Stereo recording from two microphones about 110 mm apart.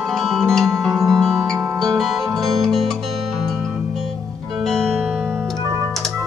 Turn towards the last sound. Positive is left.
turn(degrees=5)  # may be behind; listen again after turning